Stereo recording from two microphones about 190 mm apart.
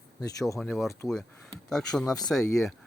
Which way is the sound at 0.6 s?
Centre (ahead or behind).